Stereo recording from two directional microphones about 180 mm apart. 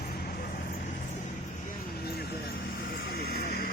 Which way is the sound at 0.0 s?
55° left (ahead or behind).